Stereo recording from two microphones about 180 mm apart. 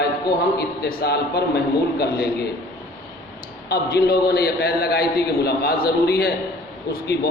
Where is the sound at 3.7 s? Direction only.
60° left (ahead or behind).